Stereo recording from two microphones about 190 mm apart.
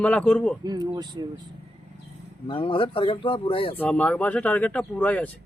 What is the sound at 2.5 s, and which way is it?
Speech, 25° left (ahead or behind).